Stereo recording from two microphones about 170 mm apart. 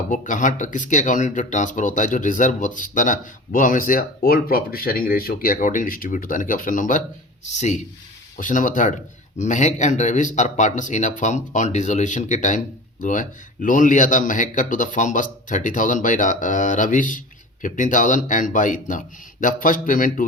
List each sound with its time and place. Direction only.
0.1 s speech: 50° left (ahead or behind)